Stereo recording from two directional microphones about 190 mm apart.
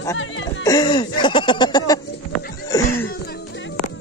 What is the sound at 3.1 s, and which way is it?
Music, 55° left (ahead or behind).